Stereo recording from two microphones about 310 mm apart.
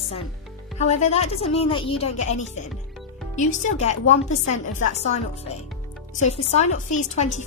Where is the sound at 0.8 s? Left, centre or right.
Left.